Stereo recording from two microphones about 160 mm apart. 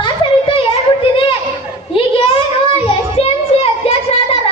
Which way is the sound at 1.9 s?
35° left (ahead or behind).